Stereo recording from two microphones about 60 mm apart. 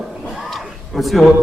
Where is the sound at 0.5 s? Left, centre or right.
Centre.